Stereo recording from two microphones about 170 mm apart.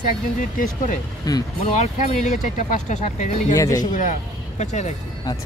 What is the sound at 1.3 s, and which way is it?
Speech, 25° left (ahead or behind).